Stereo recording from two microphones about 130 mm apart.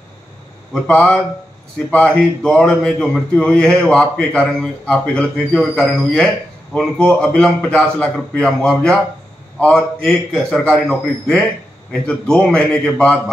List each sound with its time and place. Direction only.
0.7 s speech: 10° left (ahead or behind)